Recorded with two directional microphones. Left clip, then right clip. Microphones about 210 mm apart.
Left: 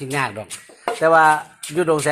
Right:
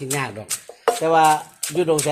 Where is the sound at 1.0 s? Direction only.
35° left (ahead or behind).